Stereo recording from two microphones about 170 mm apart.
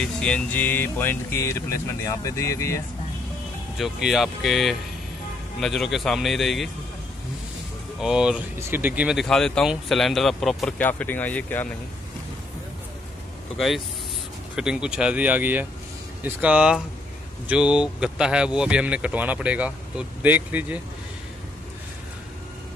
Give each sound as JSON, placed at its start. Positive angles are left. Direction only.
{"t": 0.0, "sound": "speech", "side_deg": 5}
{"t": 3.7, "sound": "speech", "side_deg": 0}
{"t": 8.0, "sound": "speech", "side_deg": -5}
{"t": 13.6, "sound": "speech", "side_deg": 0}